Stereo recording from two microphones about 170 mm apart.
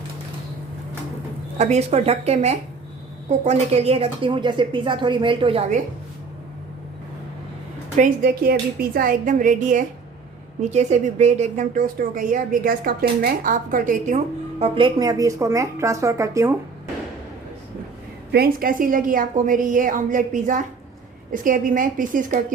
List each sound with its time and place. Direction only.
1.5 s a woman's voice: 40° right (ahead or behind)
7.9 s a woman's voice: 55° right (ahead or behind)
14.6 s a woman's voice: 30° right (ahead or behind)
18.3 s a woman's voice: 65° right (ahead or behind)